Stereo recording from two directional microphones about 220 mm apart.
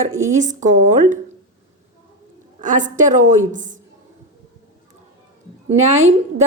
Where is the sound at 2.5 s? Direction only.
35° right (ahead or behind).